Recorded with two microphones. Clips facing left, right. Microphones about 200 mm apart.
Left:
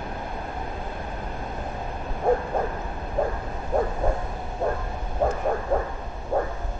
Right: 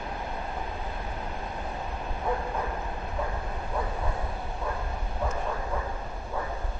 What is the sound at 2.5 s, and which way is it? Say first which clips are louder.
Bow-wow: left 5 dB; 50° left (ahead or behind).